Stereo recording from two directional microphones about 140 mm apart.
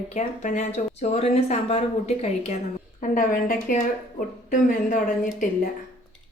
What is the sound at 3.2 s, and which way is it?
Speech, 80° left.